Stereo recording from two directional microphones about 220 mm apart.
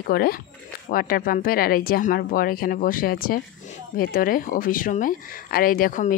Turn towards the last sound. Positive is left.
turn(degrees=40)  # may be behind; listen again after turning